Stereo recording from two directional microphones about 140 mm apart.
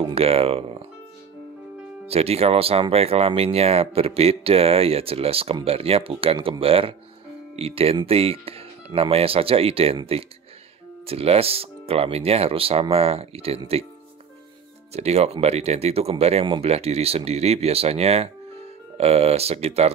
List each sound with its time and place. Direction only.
0.0 s speech: 45° right (ahead or behind)
2.0 s speech: 45° right (ahead or behind)
11.1 s speech: 45° right (ahead or behind)
14.9 s speech: 50° right (ahead or behind)